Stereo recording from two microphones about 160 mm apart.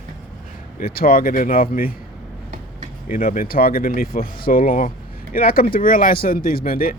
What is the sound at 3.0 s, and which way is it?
Speech, 60° left (ahead or behind).